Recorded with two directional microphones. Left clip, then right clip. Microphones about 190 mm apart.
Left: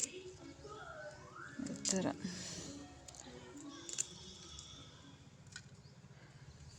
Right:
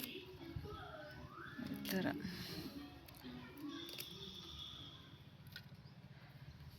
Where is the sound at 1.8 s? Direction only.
20° left (ahead or behind).